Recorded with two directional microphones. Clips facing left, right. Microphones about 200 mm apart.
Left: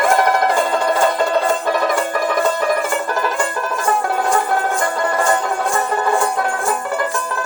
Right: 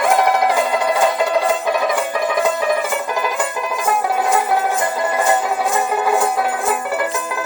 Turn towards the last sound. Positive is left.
turn(degrees=-15)  # may be behind; listen again after turning